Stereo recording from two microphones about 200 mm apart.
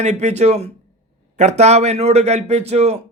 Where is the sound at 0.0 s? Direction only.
35° right (ahead or behind).